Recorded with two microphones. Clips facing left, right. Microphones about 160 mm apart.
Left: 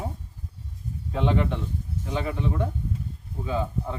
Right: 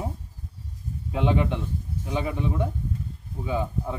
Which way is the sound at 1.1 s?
15° right (ahead or behind).